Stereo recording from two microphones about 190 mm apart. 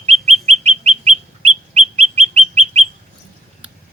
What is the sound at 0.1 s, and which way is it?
Bird, centre (ahead or behind).